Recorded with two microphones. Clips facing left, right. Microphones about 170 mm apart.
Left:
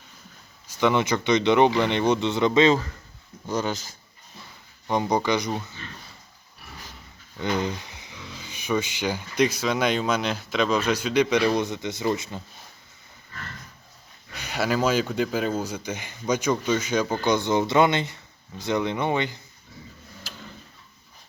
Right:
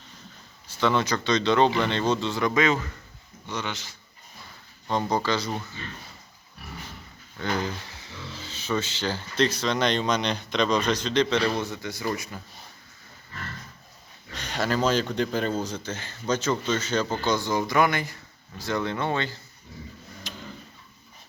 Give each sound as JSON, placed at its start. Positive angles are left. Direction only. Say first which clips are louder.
{"t": 0.8, "sound": "speech", "louder": "left 2 dB", "side_deg": 15}
{"t": 3.4, "sound": "speech", "louder": "left 6 dB", "side_deg": 40}
{"t": 4.9, "sound": "speech", "louder": "left 2 dB", "side_deg": 15}
{"t": 7.3, "sound": "speech", "louder": "left 2 dB", "side_deg": 20}
{"t": 14.3, "sound": "speech", "louder": "left 1 dB", "side_deg": 10}
{"t": 20.3, "sound": "tick-tock", "louder": "right 3 dB", "side_deg": 0}